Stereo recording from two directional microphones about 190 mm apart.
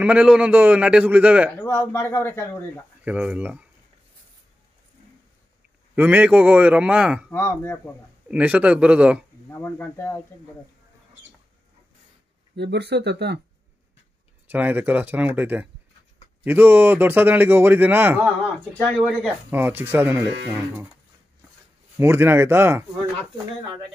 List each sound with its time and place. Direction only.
0.0 s a man's voice: 5° right (ahead or behind)
1.6 s speech: 10° left (ahead or behind)
3.1 s a man's voice: 5° right (ahead or behind)
5.9 s a man's voice: 10° right (ahead or behind)
7.2 s speech: 10° left (ahead or behind)
8.3 s a man's voice: 5° right (ahead or behind)
9.5 s speech: 10° left (ahead or behind)
12.5 s speech: 65° right (ahead or behind)
14.5 s a man's voice: 10° right (ahead or behind)
21.9 s a man's voice: 10° right (ahead or behind)